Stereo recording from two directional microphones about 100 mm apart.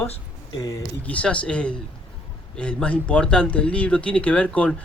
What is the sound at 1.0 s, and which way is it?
Speech, 15° left (ahead or behind).